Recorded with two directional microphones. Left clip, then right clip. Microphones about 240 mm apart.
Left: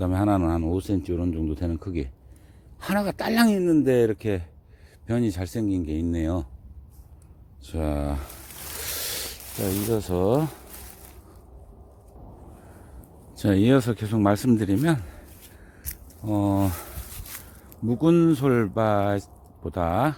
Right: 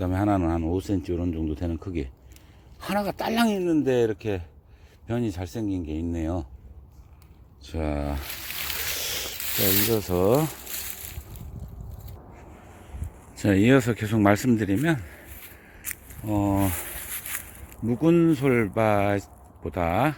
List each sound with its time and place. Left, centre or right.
0.0 s speech: centre
7.6 s speech: centre
9.0 s a sound: centre
9.6 s speech: centre
13.4 s speech: centre
16.2 s speech: centre